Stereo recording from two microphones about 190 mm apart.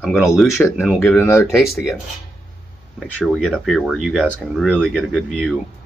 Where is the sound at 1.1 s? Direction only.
10° left (ahead or behind).